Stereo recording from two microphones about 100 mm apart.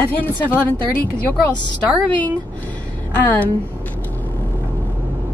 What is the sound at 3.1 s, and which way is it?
Speech, 15° left (ahead or behind).